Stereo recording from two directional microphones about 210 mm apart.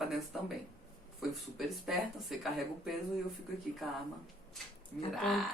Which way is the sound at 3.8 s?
Centre (ahead or behind).